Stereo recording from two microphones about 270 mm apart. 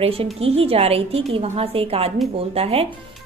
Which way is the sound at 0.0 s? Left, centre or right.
Right.